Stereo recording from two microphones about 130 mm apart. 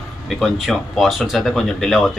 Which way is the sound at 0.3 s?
Centre (ahead or behind).